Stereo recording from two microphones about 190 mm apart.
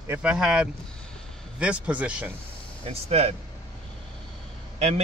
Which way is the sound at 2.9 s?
35° right (ahead or behind).